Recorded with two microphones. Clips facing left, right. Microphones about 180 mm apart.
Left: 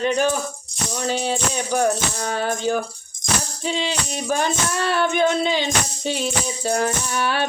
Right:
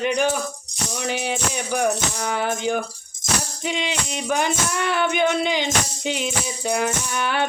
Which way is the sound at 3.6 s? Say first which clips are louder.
Left 3 dB; 15° right (ahead or behind).